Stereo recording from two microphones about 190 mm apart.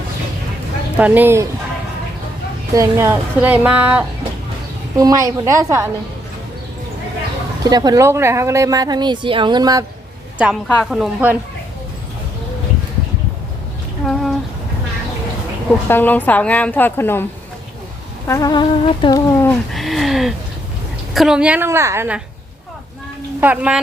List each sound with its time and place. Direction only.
0.9 s a woman's voice: 10° right (ahead or behind)
2.7 s a woman's voice: 15° right (ahead or behind)
7.6 s a woman's voice: 20° right (ahead or behind)
10.3 s a woman's voice: 5° right (ahead or behind)
14.0 s a sound: 5° left (ahead or behind)
15.9 s a woman's voice: 10° left (ahead or behind)
18.3 s a sound: 20° left (ahead or behind)
19.4 s a woman's voice: 5° left (ahead or behind); by 22.2 s 10° right (ahead or behind)
23.4 s a woman's voice: 10° right (ahead or behind)